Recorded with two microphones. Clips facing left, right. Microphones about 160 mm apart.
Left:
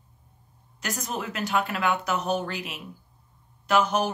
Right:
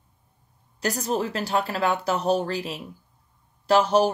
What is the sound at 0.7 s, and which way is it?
Speech, 35° right (ahead or behind).